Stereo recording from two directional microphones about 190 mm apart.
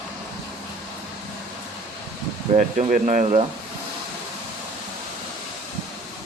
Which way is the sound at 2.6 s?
40° right (ahead or behind).